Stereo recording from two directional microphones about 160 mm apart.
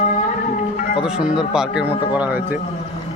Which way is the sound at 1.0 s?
5° right (ahead or behind).